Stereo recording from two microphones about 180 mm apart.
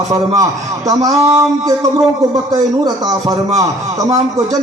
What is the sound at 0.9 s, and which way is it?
A man's voice, 20° right (ahead or behind).